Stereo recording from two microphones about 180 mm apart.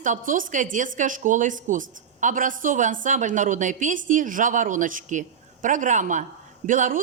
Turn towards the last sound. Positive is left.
turn(degrees=-45)  # may be behind; listen again after turning